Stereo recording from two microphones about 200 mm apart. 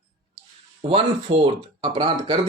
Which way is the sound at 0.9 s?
30° right (ahead or behind).